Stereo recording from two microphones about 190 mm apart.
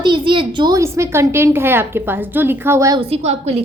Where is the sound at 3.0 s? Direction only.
30° right (ahead or behind).